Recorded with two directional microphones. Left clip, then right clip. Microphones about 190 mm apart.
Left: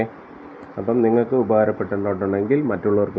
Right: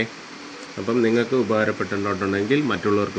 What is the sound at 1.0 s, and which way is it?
Speech, 10° right (ahead or behind).